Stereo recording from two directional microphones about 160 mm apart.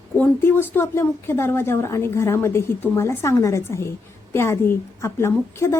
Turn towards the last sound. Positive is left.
turn(degrees=15)  # may be behind; listen again after turning